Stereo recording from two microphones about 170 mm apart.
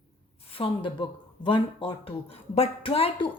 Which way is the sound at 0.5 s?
30° left (ahead or behind).